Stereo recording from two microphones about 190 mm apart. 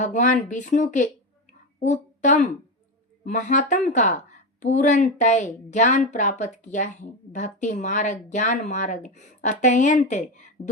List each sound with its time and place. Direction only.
0.0 s speech: 40° left (ahead or behind)
1.5 s a sound: 40° left (ahead or behind)
3.2 s speech: 40° left (ahead or behind)